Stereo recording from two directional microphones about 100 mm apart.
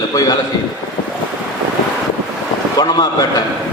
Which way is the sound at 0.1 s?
35° left (ahead or behind).